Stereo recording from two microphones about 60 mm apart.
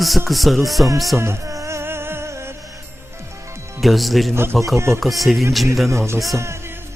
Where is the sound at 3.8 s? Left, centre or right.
Centre.